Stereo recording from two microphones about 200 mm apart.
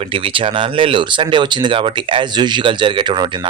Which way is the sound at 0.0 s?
25° right (ahead or behind).